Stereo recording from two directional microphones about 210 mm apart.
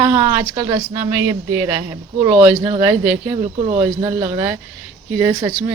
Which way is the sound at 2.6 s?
25° right (ahead or behind).